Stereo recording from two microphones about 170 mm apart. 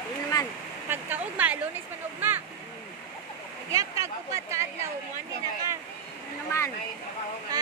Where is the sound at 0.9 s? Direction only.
10° right (ahead or behind).